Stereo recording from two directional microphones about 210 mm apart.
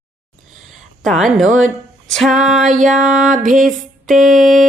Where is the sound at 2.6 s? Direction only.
35° right (ahead or behind).